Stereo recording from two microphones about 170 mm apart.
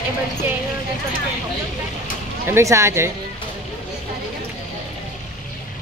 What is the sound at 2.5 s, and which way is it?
Speech, 15° right (ahead or behind).